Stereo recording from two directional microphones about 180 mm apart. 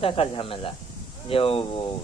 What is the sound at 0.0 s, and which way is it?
A man's voice, 30° left (ahead or behind).